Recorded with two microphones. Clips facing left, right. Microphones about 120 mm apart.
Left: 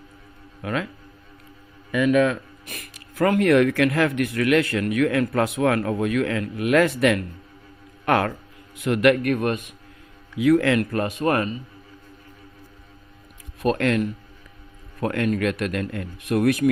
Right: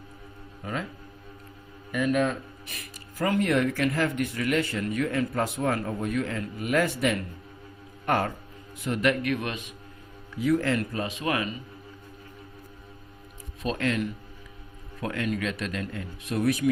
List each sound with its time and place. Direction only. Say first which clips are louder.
0.6 s a man's voice: left 6 dB; 90° left
1.9 s a man's voice: left 6 dB; 90° left
2.6 s speech: left 3 dB; 60° left (ahead or behind); by 8.3 s 80° left
8.8 s speech: left 7 dB; 65° left (ahead or behind); by 9.7 s 50° left (ahead or behind)
10.3 s speech: left 6 dB; 75° left (ahead or behind); by 11.5 s 45° left (ahead or behind)
13.6 s speech: left 7 dB; 60° left (ahead or behind)
15.0 s speech: left 7 dB; 55° left (ahead or behind)